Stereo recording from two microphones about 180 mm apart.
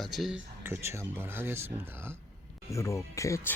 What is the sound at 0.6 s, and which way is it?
Speech, 15° right (ahead or behind).